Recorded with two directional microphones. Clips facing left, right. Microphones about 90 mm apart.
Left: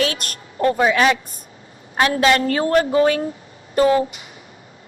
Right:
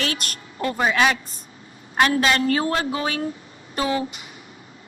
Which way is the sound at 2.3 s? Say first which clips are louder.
Left 4 dB; 45° left (ahead or behind).